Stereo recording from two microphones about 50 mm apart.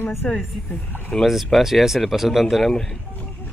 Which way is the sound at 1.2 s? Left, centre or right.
Centre.